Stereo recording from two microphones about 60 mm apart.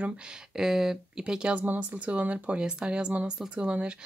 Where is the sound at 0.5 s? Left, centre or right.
Centre.